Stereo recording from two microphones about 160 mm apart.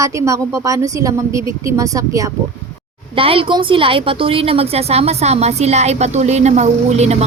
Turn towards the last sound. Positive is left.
turn(degrees=-45)  # may be behind; listen again after turning